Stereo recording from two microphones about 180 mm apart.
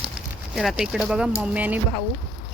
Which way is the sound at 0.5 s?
Centre (ahead or behind).